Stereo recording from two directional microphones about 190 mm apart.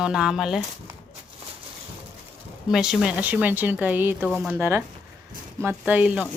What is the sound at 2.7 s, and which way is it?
Speech, 5° right (ahead or behind).